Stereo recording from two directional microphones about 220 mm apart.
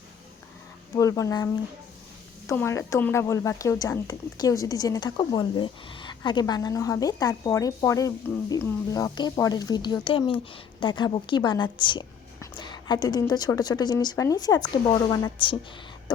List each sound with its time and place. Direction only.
0.9 s speech: 15° left (ahead or behind)
2.5 s speech: 15° left (ahead or behind)